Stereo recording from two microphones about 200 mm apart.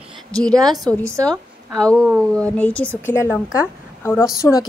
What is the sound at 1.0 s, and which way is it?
Speech, 15° right (ahead or behind).